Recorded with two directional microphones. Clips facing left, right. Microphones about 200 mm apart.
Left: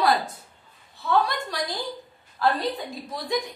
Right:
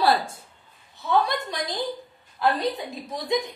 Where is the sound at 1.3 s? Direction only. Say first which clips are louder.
Right 1 dB; 20° right (ahead or behind).